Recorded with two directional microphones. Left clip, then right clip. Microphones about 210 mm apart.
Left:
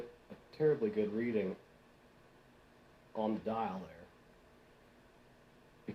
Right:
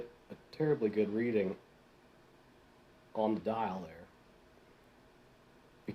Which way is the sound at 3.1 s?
50° right (ahead or behind).